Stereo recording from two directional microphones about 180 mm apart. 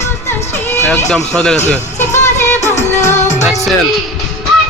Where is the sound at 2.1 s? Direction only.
40° left (ahead or behind).